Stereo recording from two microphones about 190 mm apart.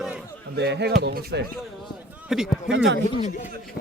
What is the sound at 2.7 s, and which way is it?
Speech, 70° right (ahead or behind).